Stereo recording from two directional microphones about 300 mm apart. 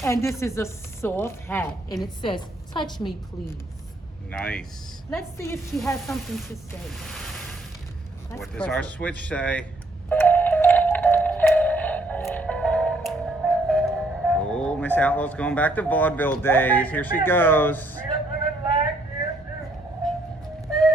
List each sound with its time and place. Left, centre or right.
0.0 s speech: centre
4.3 s speech: centre
10.1 s music: centre
17.2 s speech: centre
20.7 s music: centre